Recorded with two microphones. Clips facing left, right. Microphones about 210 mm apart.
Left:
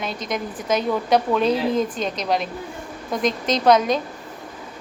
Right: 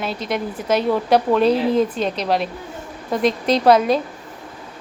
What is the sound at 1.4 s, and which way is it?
Speech, 35° right (ahead or behind).